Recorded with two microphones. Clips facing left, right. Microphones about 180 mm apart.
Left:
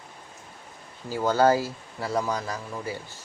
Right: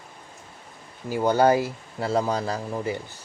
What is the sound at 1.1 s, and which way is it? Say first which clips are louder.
Speech: right 2 dB; 15° right (ahead or behind).